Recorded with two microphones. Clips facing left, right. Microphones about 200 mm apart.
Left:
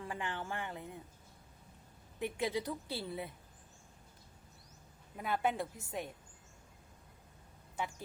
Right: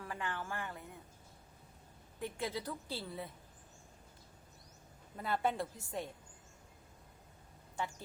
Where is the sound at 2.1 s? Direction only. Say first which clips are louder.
Left 4 dB; 20° left (ahead or behind).